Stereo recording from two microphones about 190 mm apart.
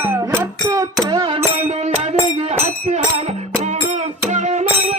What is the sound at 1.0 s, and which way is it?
Music, 25° right (ahead or behind).